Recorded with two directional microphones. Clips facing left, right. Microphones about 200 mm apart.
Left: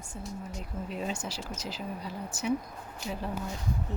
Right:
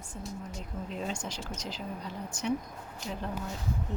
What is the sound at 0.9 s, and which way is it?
Speech, 5° left (ahead or behind).